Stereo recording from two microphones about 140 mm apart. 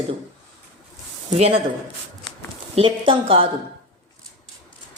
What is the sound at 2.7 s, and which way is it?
Speech, 40° right (ahead or behind).